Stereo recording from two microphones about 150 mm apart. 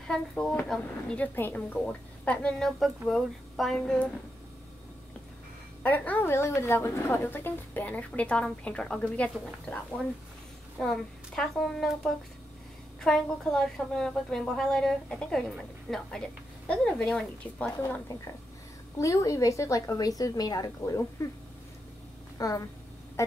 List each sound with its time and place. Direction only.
0.1 s a woman's voice: 5° left (ahead or behind)
5.8 s a woman's voice: 10° left (ahead or behind)
10.8 s a woman's voice: 5° left (ahead or behind)
17.8 s a woman's voice: 15° left (ahead or behind)
22.4 s a woman's voice: 25° left (ahead or behind)